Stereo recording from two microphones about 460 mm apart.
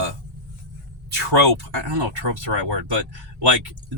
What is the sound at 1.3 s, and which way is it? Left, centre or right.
Speech, right.